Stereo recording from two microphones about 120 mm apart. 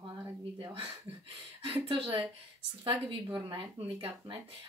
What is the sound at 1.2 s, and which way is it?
Speech, 45° right (ahead or behind).